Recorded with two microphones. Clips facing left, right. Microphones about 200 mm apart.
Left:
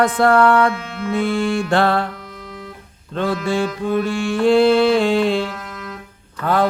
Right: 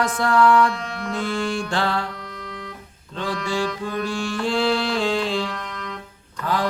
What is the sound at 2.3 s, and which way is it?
Organ, 5° left (ahead or behind).